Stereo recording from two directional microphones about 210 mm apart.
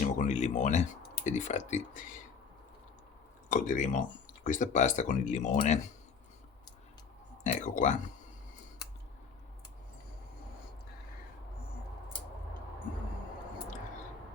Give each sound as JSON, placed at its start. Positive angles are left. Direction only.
{"t": 0.0, "sound": "speech", "side_deg": 35}
{"t": 3.5, "sound": "speech", "side_deg": 40}
{"t": 7.4, "sound": "speech", "side_deg": 35}